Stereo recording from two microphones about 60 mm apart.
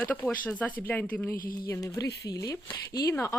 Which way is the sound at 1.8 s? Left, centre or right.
Left.